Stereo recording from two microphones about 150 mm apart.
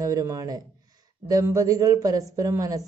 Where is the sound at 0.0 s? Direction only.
20° right (ahead or behind).